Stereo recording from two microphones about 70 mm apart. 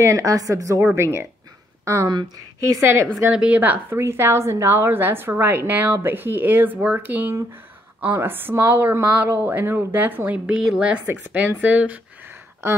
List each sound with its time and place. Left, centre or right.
0.0 s a woman's voice: right
0.9 s a woman's voice: right
2.0 s speech: right
2.6 s a woman's voice: right
3.3 s speech: centre
4.0 s a woman's voice: right
12.6 s a woman's voice: right